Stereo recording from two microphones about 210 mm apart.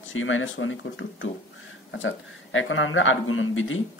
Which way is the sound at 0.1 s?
70° left (ahead or behind).